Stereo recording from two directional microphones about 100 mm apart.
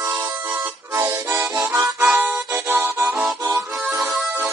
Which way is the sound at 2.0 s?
20° right (ahead or behind).